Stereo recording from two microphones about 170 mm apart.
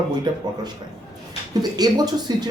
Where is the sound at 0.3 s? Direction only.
25° right (ahead or behind).